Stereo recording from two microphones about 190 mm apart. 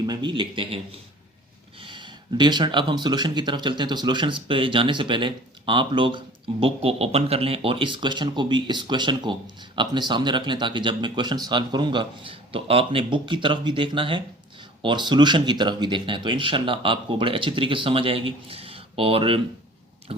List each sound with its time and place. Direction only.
0.0 s speech: 20° right (ahead or behind)
1.8 s speech: 25° right (ahead or behind)
20.1 s a sound: 30° right (ahead or behind)